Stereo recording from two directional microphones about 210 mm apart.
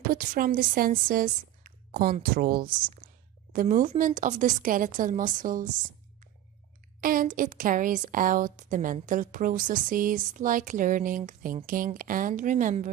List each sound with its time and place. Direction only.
0.1 s a woman's voice: 40° right (ahead or behind)
7.0 s a woman's voice: 40° right (ahead or behind)